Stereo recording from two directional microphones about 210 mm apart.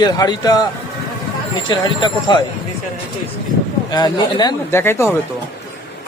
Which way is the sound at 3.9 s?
20° left (ahead or behind).